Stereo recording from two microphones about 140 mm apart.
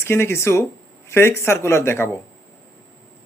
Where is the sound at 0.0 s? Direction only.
15° left (ahead or behind).